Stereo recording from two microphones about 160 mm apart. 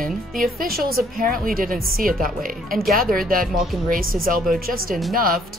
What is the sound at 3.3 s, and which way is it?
Speech, 60° right (ahead or behind).